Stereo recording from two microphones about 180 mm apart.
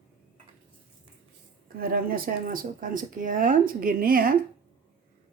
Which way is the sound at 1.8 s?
55° right (ahead or behind).